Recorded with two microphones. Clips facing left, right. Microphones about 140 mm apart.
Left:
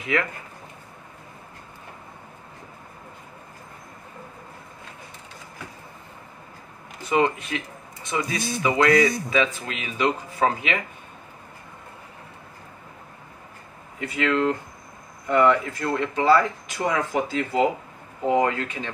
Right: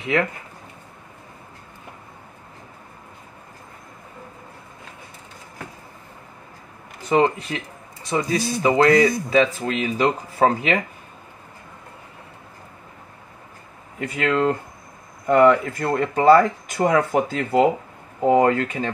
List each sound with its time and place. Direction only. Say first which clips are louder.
0.0 s speech: right 4 dB; 25° right (ahead or behind)
7.1 s speech: right 3 dB; 35° right (ahead or behind)
13.9 s speech: right 2 dB; 45° right (ahead or behind)